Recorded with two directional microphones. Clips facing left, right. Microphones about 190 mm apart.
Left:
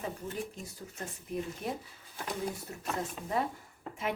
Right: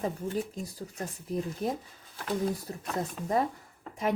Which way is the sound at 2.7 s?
35° right (ahead or behind).